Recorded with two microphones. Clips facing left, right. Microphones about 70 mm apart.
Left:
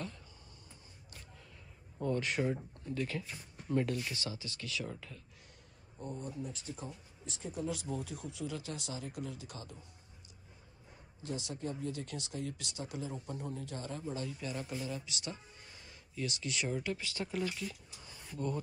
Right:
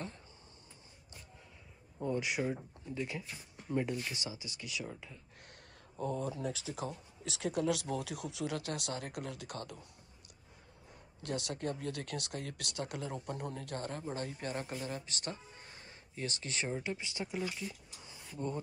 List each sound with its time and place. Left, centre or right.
2.0 s speech: centre
5.5 s speech: right
11.2 s speech: right; by 18.2 s centre